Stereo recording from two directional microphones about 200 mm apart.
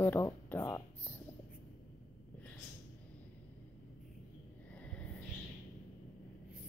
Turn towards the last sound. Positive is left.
turn(degrees=5)  # may be behind; listen again after turning